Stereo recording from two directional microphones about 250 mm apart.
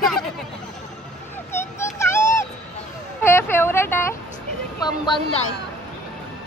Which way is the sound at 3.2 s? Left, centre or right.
Centre.